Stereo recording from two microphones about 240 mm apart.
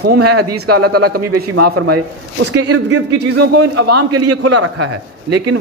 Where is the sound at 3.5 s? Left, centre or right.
Right.